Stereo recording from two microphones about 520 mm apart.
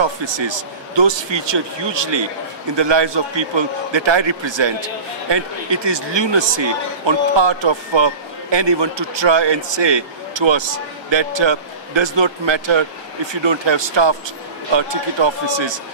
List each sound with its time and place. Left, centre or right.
0.0 s a man's voice: right